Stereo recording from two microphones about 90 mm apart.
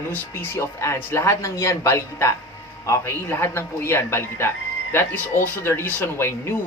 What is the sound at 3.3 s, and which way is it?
Speech, 25° left (ahead or behind).